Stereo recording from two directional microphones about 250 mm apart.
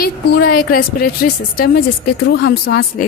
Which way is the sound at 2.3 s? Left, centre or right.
Left.